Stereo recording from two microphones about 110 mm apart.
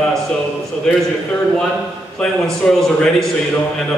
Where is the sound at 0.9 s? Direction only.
5° left (ahead or behind).